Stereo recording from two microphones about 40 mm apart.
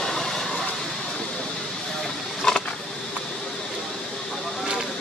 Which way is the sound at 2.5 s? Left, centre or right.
Centre.